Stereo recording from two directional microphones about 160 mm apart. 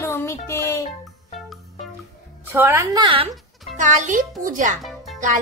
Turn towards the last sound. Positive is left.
turn(degrees=0)  # may be behind; listen again after turning